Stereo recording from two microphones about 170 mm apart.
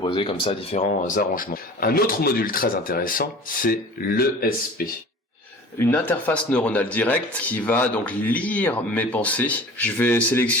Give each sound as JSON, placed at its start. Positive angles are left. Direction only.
{"t": 0.0, "sound": "speech", "side_deg": 30}
{"t": 5.8, "sound": "speech", "side_deg": 10}